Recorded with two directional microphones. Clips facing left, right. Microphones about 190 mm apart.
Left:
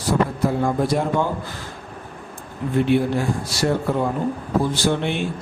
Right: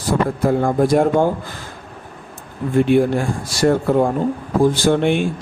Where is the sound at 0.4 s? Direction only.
50° right (ahead or behind).